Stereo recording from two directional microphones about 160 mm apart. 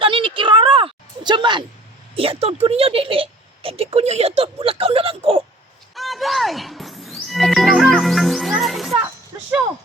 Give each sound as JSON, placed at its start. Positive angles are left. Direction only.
{"t": 0.0, "sound": "a sound", "side_deg": -30}
{"t": 2.1, "sound": "a woman's voice", "side_deg": -35}
{"t": 5.9, "sound": "music", "side_deg": 0}